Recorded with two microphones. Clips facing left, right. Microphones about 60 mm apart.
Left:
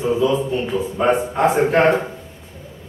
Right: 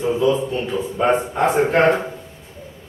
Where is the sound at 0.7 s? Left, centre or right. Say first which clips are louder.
Even; centre.